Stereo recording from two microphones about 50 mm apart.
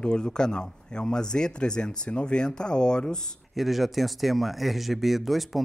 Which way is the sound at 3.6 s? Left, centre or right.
Centre.